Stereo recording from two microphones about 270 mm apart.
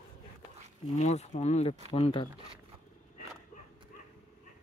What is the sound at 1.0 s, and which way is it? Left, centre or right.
Speech, left.